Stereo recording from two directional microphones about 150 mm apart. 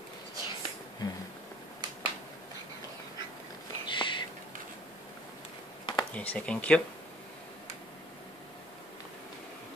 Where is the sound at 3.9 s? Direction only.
35° left (ahead or behind).